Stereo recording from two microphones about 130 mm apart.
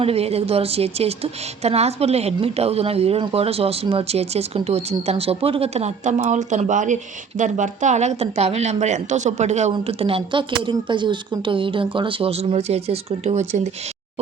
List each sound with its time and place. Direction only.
0.0 s a woman's voice: 50° right (ahead or behind)
9.8 s a woman's voice: 45° right (ahead or behind)